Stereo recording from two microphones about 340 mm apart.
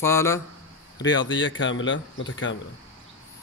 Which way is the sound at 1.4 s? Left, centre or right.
Left.